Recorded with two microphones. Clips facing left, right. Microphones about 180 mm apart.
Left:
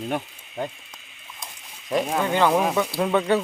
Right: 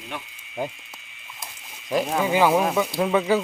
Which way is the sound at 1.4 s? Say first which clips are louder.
Even; 5° right (ahead or behind).